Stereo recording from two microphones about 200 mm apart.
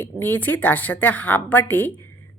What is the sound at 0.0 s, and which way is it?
A woman's voice, 10° left (ahead or behind).